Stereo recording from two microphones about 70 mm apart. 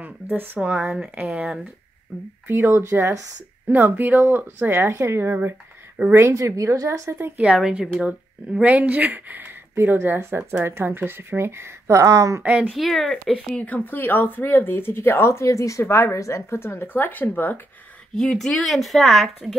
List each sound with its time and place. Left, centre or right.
0.0 s a sound: right
0.6 s speech: right
2.4 s speech: right
3.6 s a woman's voice: right
7.3 s a woman's voice: centre
8.5 s speech: right
12.0 s speech: right
12.7 s speech: centre
13.7 s speech: left
18.1 s a woman's voice: centre